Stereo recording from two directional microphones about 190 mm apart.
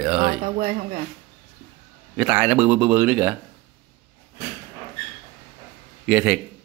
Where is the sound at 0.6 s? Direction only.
40° right (ahead or behind).